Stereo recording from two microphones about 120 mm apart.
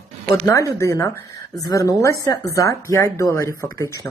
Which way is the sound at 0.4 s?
25° left (ahead or behind).